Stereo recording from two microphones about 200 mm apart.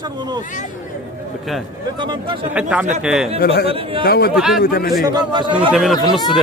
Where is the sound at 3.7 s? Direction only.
25° right (ahead or behind).